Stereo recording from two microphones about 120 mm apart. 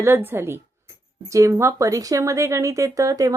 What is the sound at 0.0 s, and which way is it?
Speech, 20° right (ahead or behind).